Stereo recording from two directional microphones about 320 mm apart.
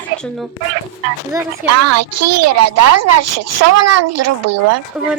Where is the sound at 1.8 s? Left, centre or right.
Right.